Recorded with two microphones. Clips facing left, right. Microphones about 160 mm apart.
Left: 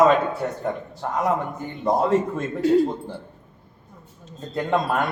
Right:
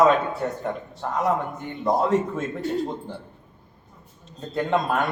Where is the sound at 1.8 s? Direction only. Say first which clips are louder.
Left 1 dB; centre (ahead or behind).